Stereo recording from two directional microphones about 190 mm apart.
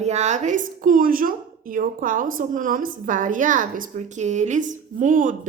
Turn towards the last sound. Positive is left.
turn(degrees=-45)  # may be behind; listen again after turning